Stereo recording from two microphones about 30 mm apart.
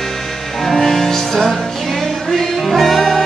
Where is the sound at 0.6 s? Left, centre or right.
Centre.